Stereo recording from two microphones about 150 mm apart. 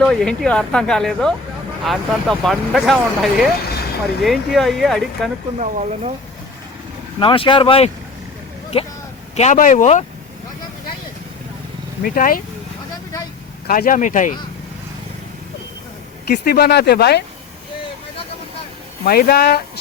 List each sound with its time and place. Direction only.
0.0 s speech: 5° left (ahead or behind)
5.5 s speech: 50° right (ahead or behind)
7.2 s speech: 35° left (ahead or behind)
9.3 s speech: 50° left (ahead or behind)
12.0 s speech: 70° left (ahead or behind)
13.7 s speech: 65° left (ahead or behind)
16.3 s speech: 90° left
19.0 s speech: 90° left